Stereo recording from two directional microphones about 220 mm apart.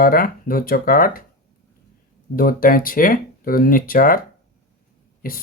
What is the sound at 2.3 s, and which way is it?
Speech, 40° left (ahead or behind).